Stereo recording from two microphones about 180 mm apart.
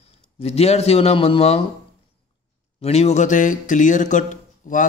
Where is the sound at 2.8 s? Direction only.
35° left (ahead or behind).